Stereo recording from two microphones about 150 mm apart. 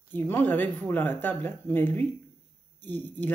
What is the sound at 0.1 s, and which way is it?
A woman's voice, 15° left (ahead or behind).